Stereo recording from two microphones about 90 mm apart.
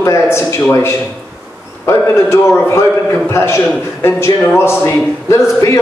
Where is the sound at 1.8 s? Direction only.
30° left (ahead or behind).